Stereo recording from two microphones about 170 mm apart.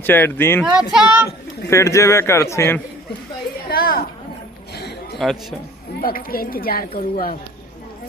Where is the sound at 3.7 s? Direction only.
60° left (ahead or behind).